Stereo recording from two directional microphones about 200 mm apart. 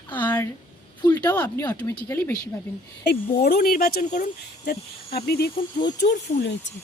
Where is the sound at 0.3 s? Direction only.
10° left (ahead or behind).